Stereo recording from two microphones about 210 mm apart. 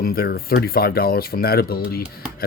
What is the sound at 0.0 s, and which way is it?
Speech, 45° left (ahead or behind).